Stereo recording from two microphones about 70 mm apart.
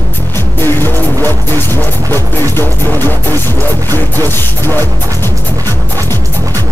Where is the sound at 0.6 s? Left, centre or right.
Left.